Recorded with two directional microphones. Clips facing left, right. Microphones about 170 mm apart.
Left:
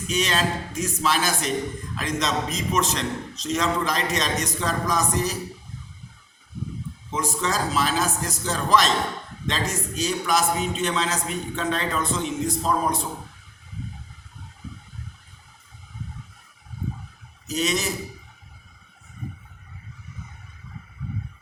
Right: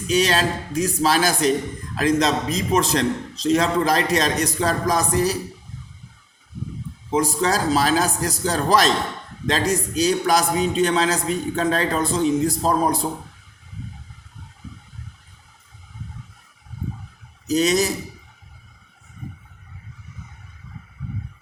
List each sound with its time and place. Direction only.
0.1 s a man's voice: 35° right (ahead or behind)
7.1 s a man's voice: 35° right (ahead or behind)
17.4 s a man's voice: 40° right (ahead or behind)